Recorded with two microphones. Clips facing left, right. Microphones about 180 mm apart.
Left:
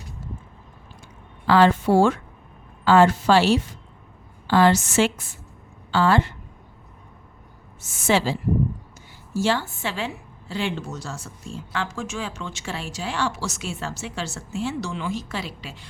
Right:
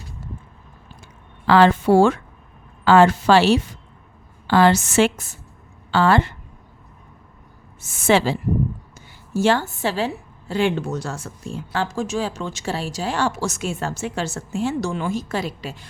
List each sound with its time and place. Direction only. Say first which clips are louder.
1.5 s a woman's voice: right 3 dB; 75° right (ahead or behind)
5.1 s a woman's voice: right 2 dB; 40° right (ahead or behind)
5.9 s speech: right 2 dB; 65° right (ahead or behind)
7.8 s speech: right 4 dB; 60° right (ahead or behind)
9.8 s a woman's voice: right 6 dB; 40° right (ahead or behind)
10.5 s speech: right 7 dB; 55° right (ahead or behind)
11.7 s a woman's voice: right 6 dB; 35° right (ahead or behind)